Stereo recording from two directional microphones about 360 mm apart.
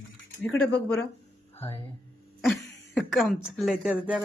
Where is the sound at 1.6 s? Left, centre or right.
Centre.